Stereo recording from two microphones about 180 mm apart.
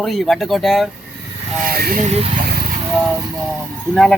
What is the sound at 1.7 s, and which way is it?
Speech, 55° right (ahead or behind).